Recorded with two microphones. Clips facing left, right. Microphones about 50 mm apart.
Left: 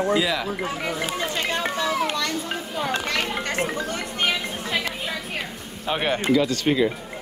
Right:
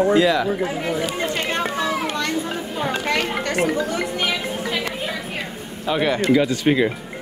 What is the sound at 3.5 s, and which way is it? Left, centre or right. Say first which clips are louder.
Speech: right 8 dB; right.